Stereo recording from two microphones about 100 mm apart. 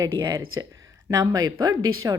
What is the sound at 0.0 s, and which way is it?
A woman's voice, 45° right (ahead or behind).